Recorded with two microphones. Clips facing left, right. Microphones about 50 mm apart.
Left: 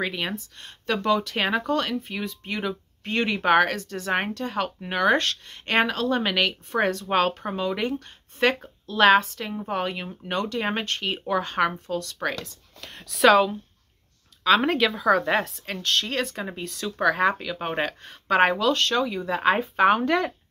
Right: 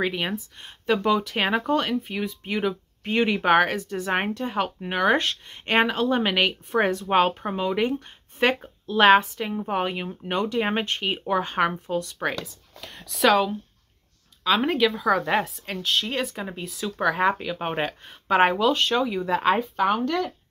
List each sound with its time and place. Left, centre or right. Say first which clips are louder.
0.0 s speech: right 2 dB; centre